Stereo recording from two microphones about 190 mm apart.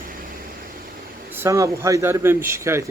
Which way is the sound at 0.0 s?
50° right (ahead or behind).